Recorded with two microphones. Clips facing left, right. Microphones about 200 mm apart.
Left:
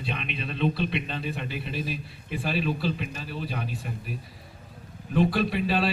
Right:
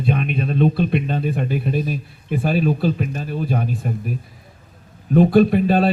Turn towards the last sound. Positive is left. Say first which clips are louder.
# right 10 dB
turn(degrees=-50)  # may be behind; listen again after turning